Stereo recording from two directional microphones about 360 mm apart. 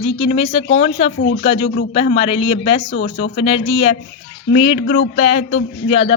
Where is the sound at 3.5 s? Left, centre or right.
Centre.